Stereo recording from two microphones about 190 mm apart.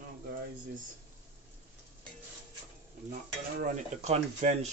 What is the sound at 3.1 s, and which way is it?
Stir, 40° right (ahead or behind).